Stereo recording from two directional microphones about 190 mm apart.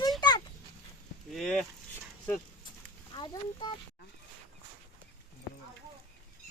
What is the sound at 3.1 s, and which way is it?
Speech, 25° left (ahead or behind).